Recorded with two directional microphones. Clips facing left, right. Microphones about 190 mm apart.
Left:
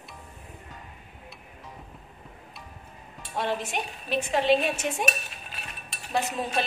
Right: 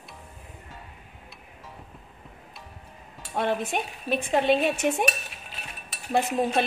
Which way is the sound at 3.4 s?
55° right (ahead or behind).